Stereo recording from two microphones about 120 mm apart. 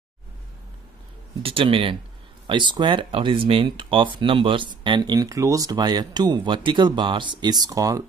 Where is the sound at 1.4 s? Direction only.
50° right (ahead or behind).